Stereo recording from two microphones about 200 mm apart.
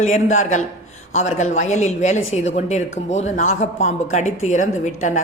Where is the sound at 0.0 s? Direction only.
35° left (ahead or behind).